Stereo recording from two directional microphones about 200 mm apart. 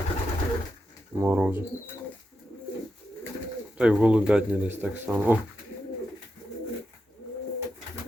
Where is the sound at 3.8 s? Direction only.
5° right (ahead or behind).